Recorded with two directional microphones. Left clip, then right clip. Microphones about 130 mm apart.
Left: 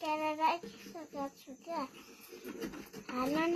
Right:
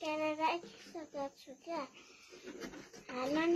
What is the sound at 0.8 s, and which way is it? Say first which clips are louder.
A child's voice: left 1 dB; 35° right (ahead or behind).